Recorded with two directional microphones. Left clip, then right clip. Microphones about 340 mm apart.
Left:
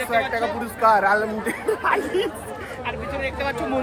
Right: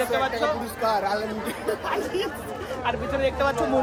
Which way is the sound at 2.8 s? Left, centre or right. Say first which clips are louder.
Right 3 dB; centre.